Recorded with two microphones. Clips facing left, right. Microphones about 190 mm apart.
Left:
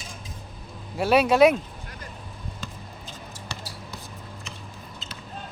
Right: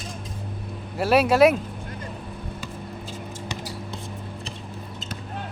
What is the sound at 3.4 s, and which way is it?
Basketball bounce, 20° right (ahead or behind).